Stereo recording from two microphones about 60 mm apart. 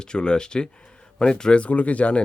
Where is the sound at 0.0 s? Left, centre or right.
Centre.